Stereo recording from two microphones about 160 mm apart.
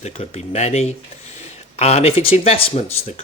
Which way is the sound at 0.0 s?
45° left (ahead or behind).